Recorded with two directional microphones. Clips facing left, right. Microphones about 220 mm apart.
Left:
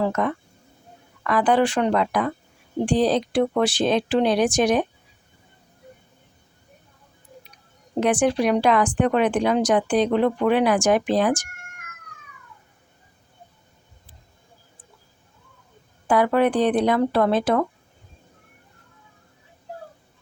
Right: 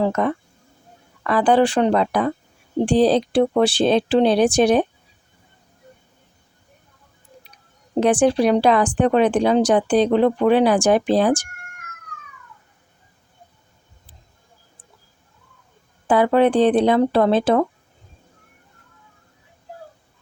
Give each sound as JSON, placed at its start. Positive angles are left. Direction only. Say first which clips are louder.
{"t": 0.0, "sound": "speech", "louder": "right 3 dB", "side_deg": -30}
{"t": 7.9, "sound": "speech", "louder": "right 4 dB", "side_deg": -30}
{"t": 16.0, "sound": "speech", "louder": "right 3 dB", "side_deg": -25}